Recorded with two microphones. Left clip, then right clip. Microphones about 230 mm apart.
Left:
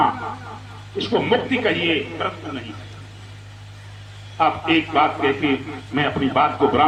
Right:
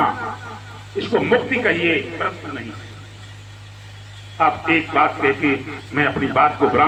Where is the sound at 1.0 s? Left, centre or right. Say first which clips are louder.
Right 2 dB; left.